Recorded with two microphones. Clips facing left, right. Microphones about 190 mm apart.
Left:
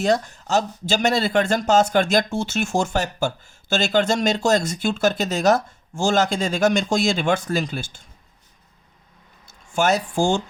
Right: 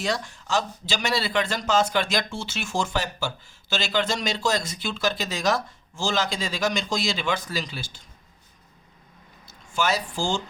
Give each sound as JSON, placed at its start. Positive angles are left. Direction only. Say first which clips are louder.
{"t": 0.0, "sound": "speech", "louder": "left 8 dB", "side_deg": 40}
{"t": 9.7, "sound": "speech", "louder": "left 6 dB", "side_deg": 50}